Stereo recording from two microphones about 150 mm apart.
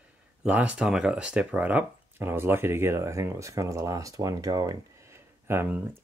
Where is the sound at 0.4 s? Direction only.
10° right (ahead or behind).